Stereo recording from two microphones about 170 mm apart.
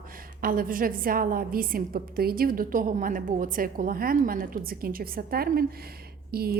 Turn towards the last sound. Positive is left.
turn(degrees=-65)  # may be behind; listen again after turning